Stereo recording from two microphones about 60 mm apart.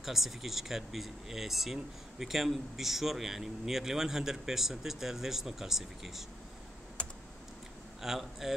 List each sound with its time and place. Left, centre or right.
0.0 s speech: centre
7.0 s computer keyboard: centre
8.0 s speech: centre